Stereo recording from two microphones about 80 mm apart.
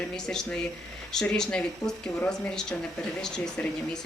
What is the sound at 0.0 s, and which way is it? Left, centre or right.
Speech, centre.